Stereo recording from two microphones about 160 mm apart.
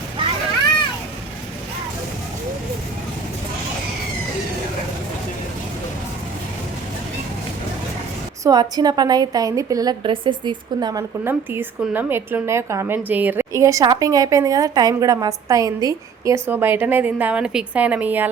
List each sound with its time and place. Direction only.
8.4 s a woman's voice: 25° right (ahead or behind)
11.2 s a woman's voice: 15° right (ahead or behind)